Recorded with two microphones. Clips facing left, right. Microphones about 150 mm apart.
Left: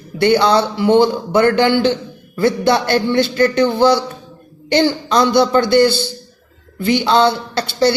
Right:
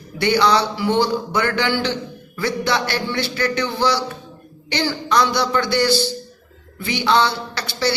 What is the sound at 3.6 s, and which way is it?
Speech, 55° left (ahead or behind).